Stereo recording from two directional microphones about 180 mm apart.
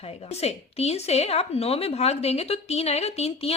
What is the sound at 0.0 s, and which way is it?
A woman's voice, 35° left (ahead or behind).